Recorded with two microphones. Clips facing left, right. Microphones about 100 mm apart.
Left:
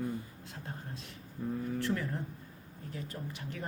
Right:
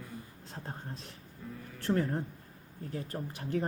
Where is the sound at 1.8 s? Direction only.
40° right (ahead or behind).